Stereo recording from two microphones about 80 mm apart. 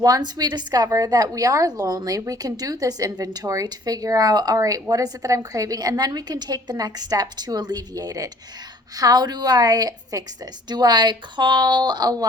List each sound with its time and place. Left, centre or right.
0.0 s a woman's voice: right
10.7 s speech: right